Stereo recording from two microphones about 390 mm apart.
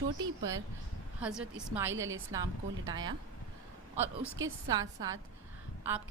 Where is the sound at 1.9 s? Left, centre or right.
Right.